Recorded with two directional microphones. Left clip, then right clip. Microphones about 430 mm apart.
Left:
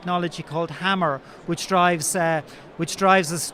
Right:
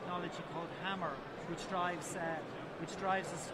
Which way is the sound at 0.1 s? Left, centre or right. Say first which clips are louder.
Left 19 dB; left.